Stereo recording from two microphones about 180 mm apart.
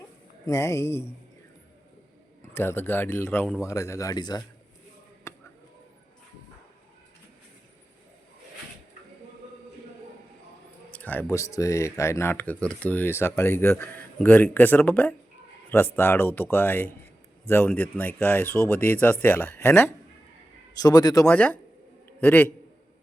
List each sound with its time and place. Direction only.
0.4 s speech: 15° left (ahead or behind)
2.4 s speech: 15° left (ahead or behind)
5.3 s a sound: 15° left (ahead or behind)
10.9 s speech: 10° left (ahead or behind)
21.2 s speech: 5° left (ahead or behind)